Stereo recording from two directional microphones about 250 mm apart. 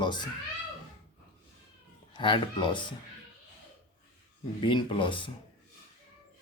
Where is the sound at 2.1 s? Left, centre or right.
Centre.